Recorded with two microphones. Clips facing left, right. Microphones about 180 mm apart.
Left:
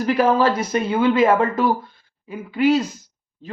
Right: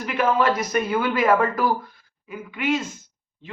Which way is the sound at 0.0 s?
35° left (ahead or behind).